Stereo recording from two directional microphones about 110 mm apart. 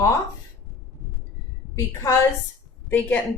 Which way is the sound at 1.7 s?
25° left (ahead or behind).